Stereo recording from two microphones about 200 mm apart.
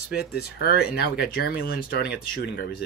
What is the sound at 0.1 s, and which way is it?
Speech, 50° left (ahead or behind).